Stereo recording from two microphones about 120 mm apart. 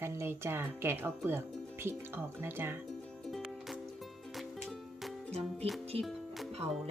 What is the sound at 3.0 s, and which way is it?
Music, 5° left (ahead or behind).